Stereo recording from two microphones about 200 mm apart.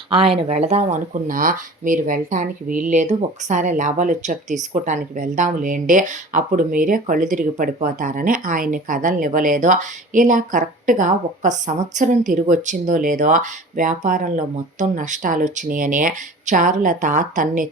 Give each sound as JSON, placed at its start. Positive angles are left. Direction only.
{"t": 0.4, "sound": "speech", "side_deg": -30}